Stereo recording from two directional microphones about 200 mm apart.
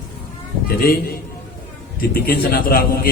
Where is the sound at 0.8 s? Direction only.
50° left (ahead or behind).